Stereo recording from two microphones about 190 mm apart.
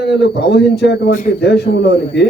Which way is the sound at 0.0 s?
65° left (ahead or behind).